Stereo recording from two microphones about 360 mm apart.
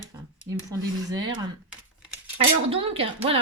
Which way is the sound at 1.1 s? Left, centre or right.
Centre.